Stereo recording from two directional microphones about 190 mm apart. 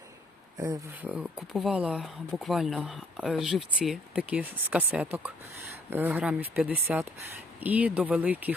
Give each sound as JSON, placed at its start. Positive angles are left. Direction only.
{"t": 0.6, "sound": "speech", "side_deg": -20}
{"t": 1.1, "sound": "speech", "side_deg": -5}